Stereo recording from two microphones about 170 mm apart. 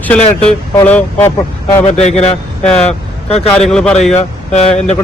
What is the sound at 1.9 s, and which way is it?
Speech, 40° left (ahead or behind).